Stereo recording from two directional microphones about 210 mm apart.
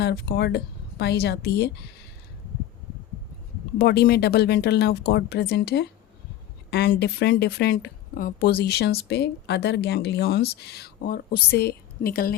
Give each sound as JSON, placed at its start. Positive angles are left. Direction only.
{"t": 0.0, "sound": "speech", "side_deg": 50}
{"t": 3.8, "sound": "speech", "side_deg": 50}